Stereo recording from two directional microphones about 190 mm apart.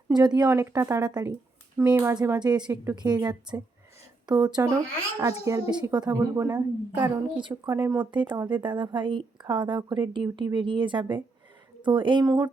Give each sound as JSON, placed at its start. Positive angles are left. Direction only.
{"t": 0.2, "sound": "a woman's voice", "side_deg": -20}
{"t": 7.0, "sound": "a woman's voice", "side_deg": -25}